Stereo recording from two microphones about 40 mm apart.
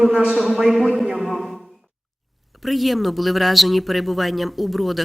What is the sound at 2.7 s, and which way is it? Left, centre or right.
Speech, centre.